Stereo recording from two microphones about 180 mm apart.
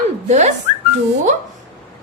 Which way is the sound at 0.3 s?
40° right (ahead or behind).